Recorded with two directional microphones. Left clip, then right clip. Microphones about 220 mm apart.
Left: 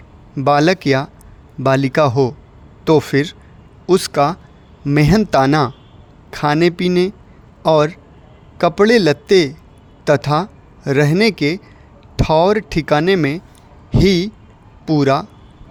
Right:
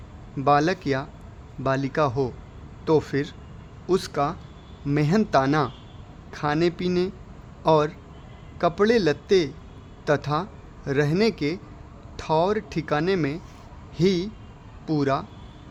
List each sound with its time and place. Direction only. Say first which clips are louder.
0.3 s a man's voice: left 7 dB; 35° left (ahead or behind)